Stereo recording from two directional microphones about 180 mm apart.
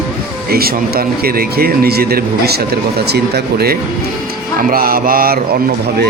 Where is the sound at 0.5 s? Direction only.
55° right (ahead or behind).